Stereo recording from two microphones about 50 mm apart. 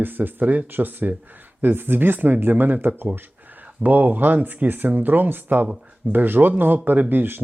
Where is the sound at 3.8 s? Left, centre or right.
Right.